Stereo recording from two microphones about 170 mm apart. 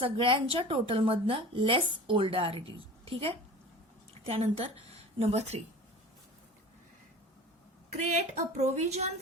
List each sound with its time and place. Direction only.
0.0 s speech: 30° right (ahead or behind)
7.9 s speech: 40° right (ahead or behind)